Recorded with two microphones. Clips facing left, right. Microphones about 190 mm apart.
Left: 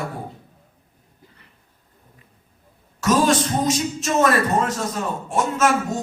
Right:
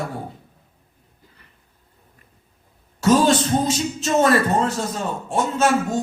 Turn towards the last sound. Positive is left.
turn(degrees=-30)  # may be behind; listen again after turning